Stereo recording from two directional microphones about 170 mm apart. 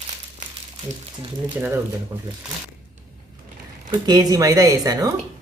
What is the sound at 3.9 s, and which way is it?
Speech, 25° right (ahead or behind).